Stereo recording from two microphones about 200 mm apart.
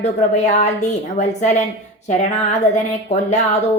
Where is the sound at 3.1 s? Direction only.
35° left (ahead or behind).